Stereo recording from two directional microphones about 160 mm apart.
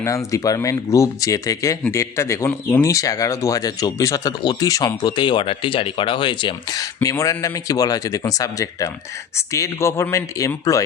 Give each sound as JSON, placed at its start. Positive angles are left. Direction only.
{"t": 0.0, "sound": "speech", "side_deg": 20}